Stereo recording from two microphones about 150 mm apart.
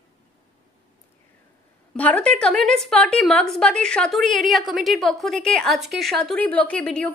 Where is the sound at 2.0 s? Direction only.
10° left (ahead or behind).